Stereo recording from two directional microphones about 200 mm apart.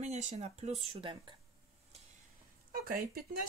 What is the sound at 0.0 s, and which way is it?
Speech, 35° right (ahead or behind).